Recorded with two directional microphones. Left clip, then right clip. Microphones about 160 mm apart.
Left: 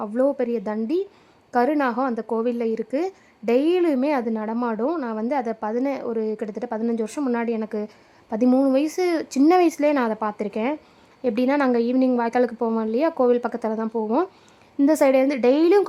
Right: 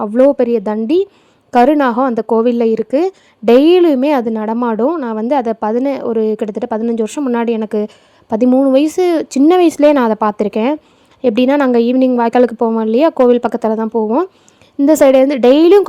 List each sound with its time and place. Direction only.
0.0 s a woman's voice: 40° right (ahead or behind)
7.2 s a woman's voice: 25° right (ahead or behind)
7.4 s a woman's voice: 40° right (ahead or behind)
8.4 s a woman's voice: 20° right (ahead or behind)
8.7 s a woman's voice: 35° right (ahead or behind)